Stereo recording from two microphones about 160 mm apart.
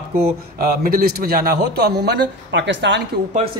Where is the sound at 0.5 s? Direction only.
70° right (ahead or behind); by 3.0 s 90° right.